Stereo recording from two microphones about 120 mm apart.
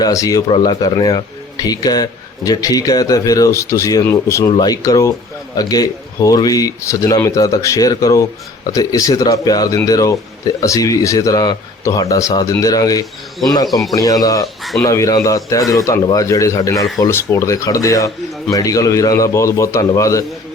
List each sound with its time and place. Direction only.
0.0 s speech: 30° left (ahead or behind)
14.4 s speech: centre (ahead or behind)
14.8 s speech: 25° left (ahead or behind)